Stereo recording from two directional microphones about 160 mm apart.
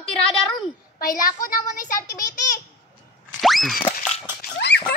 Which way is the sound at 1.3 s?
60° left (ahead or behind).